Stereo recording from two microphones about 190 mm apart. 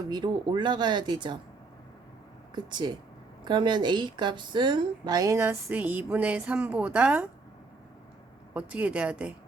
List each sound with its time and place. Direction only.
0.1 s speech: 25° right (ahead or behind)
2.6 s a woman's voice: 25° right (ahead or behind); by 7.3 s 5° right (ahead or behind)
8.5 s a woman's voice: 5° right (ahead or behind)